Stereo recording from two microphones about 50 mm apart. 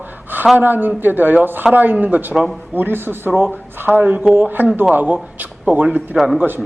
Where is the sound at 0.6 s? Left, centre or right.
Right.